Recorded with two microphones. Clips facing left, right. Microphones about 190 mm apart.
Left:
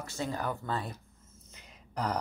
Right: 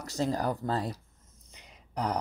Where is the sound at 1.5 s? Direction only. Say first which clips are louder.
Right 2 dB; 15° right (ahead or behind).